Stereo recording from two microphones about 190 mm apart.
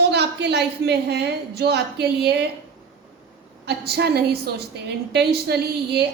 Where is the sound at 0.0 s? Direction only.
60° right (ahead or behind).